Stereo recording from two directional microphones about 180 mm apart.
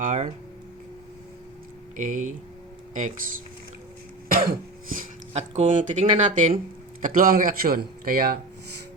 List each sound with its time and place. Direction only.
0.0 s a man's voice: 45° right (ahead or behind)
2.0 s a man's voice: 45° right (ahead or behind)
4.3 s throat clearing: 55° right (ahead or behind)
5.3 s a man's voice: 40° right (ahead or behind)